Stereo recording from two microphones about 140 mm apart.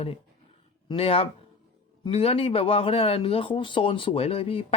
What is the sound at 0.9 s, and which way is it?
Speech, 40° left (ahead or behind).